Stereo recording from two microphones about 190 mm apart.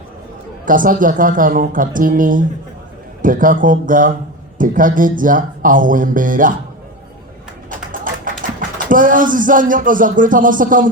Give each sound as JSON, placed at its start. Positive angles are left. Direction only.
{"t": 0.6, "sound": "music", "side_deg": -45}
{"t": 8.9, "sound": "music", "side_deg": -45}